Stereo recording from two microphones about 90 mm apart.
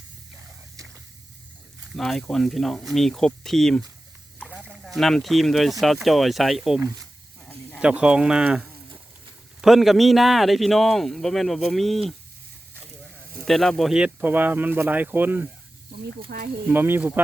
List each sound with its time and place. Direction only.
2.0 s speech: 5° left (ahead or behind)
7.4 s snake: 15° left (ahead or behind)
7.8 s speech: 10° right (ahead or behind)
13.4 s speech: 5° left (ahead or behind)
13.9 s speech: 15° right (ahead or behind)
16.6 s speech: 25° right (ahead or behind)